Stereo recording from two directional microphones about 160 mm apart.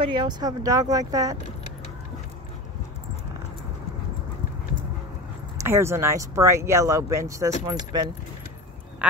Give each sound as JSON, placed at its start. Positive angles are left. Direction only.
{"t": 0.0, "sound": "speech", "side_deg": -30}
{"t": 5.6, "sound": "speech", "side_deg": -15}